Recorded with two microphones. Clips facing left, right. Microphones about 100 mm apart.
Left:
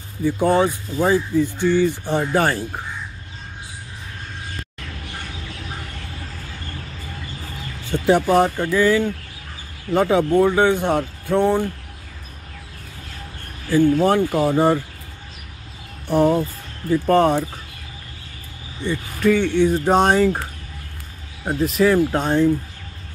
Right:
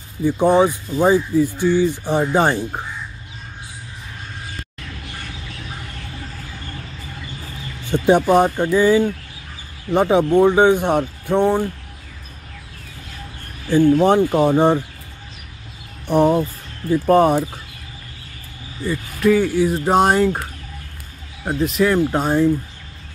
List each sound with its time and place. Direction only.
0.2 s speech: 15° right (ahead or behind)
7.8 s speech: 20° right (ahead or behind)
13.7 s speech: 20° right (ahead or behind)
16.1 s speech: 15° right (ahead or behind)
18.8 s speech: 5° right (ahead or behind)
21.5 s speech: centre (ahead or behind)